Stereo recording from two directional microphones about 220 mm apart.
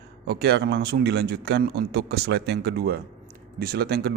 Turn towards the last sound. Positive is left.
turn(degrees=-45)  # may be behind; listen again after turning